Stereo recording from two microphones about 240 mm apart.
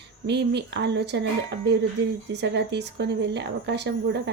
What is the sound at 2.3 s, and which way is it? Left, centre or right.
A woman's voice, right.